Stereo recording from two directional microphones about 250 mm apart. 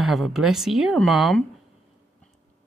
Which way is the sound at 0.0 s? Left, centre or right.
Centre.